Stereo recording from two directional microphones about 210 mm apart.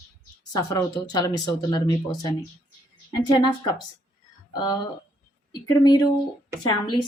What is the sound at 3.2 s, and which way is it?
Speech, 20° left (ahead or behind).